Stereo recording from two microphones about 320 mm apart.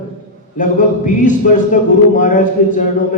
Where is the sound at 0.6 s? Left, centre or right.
Left.